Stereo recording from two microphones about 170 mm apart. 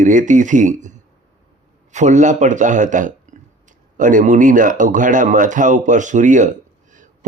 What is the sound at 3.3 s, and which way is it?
Burping, 45° right (ahead or behind).